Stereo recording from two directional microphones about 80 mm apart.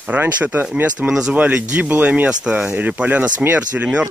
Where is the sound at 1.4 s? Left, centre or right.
Centre.